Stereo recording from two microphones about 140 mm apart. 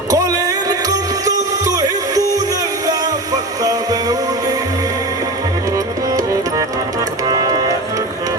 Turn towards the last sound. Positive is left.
turn(degrees=-25)  # may be behind; listen again after turning